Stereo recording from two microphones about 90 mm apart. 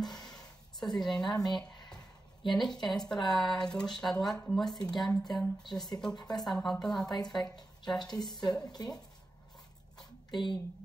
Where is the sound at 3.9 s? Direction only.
5° left (ahead or behind).